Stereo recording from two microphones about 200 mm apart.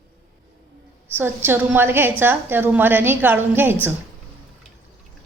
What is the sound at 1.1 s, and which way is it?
A woman's voice, 10° right (ahead or behind).